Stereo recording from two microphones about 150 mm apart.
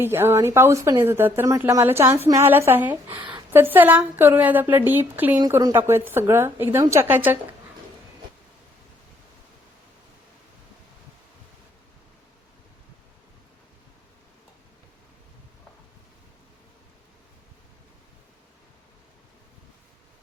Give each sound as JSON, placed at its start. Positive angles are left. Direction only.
{"t": 0.0, "sound": "a woman's voice", "side_deg": -15}
{"t": 3.1, "sound": "speech", "side_deg": -30}
{"t": 3.5, "sound": "a woman's voice", "side_deg": -15}